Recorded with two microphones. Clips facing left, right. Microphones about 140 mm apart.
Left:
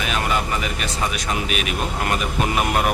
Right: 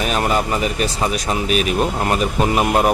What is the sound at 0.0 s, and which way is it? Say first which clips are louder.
Speech: right 4 dB; 40° right (ahead or behind).